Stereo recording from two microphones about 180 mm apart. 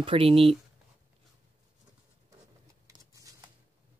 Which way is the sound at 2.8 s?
20° right (ahead or behind).